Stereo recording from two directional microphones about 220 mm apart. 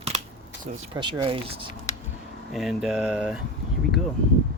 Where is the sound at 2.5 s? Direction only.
Centre (ahead or behind).